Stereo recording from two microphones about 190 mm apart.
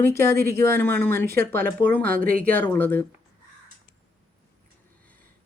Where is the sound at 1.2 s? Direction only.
55° right (ahead or behind).